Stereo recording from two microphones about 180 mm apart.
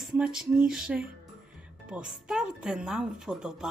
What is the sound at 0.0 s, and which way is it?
Speech, 5° right (ahead or behind).